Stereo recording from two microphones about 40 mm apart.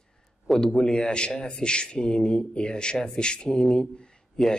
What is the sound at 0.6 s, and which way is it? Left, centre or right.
Speech, centre.